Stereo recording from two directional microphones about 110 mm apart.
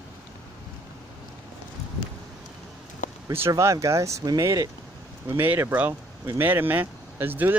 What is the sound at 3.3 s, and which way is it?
Speech, 25° right (ahead or behind).